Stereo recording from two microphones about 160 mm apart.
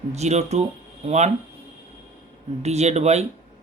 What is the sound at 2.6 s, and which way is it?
Speech, 45° right (ahead or behind).